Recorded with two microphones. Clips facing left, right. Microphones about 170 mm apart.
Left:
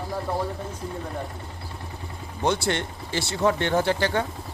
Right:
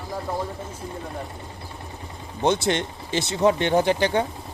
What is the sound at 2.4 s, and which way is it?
Speech, 20° right (ahead or behind).